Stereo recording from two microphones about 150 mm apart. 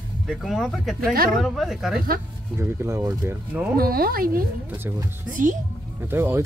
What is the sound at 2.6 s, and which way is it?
Speech, 20° right (ahead or behind).